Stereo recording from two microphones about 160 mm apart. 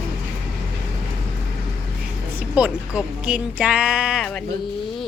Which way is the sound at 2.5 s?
10° right (ahead or behind).